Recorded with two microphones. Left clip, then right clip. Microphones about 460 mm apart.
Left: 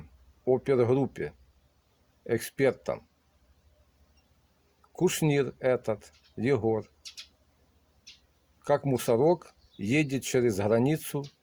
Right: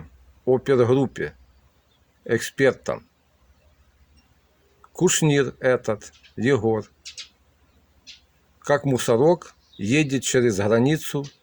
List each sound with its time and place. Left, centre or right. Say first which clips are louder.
0.4 s speech: right 6 dB; left
4.9 s speech: right 7 dB; left
8.6 s speech: right 6 dB; left